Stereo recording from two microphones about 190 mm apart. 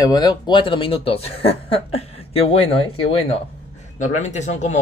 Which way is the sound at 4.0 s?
40° left (ahead or behind).